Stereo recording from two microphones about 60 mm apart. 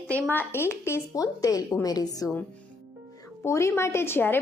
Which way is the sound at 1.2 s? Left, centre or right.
Left.